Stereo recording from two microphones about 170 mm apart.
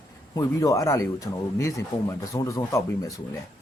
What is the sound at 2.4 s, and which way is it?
Speech, 20° left (ahead or behind).